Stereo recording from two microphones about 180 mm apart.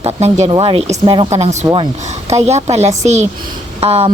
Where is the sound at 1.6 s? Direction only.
25° right (ahead or behind).